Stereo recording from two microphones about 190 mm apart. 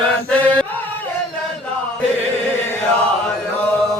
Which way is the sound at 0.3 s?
5° left (ahead or behind).